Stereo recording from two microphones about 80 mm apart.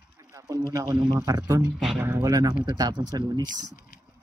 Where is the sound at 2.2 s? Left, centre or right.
Right.